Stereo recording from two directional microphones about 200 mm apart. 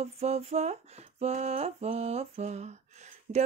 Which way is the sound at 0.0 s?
30° right (ahead or behind).